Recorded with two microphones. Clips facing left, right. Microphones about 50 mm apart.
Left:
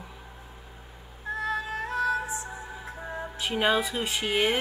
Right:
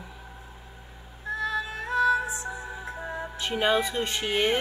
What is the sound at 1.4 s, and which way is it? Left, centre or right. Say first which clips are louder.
Music: even; left.